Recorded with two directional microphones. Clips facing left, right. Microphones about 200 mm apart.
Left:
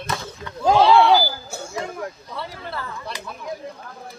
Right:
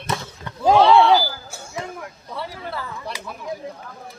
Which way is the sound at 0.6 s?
5° left (ahead or behind).